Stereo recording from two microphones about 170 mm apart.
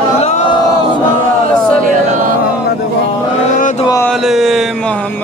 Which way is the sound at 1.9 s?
50° right (ahead or behind).